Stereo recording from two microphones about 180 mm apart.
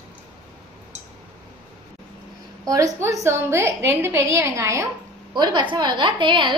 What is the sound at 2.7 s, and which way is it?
A woman's voice, 20° right (ahead or behind).